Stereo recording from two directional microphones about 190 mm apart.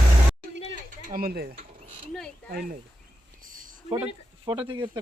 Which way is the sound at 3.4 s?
45° right (ahead or behind).